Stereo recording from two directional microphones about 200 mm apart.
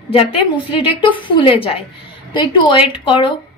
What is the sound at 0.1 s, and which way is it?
A woman's voice, 30° left (ahead or behind).